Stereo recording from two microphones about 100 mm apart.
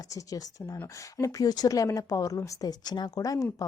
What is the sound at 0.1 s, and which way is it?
Speech, 35° left (ahead or behind).